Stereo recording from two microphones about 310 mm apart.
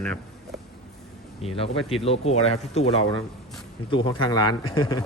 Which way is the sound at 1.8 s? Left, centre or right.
Centre.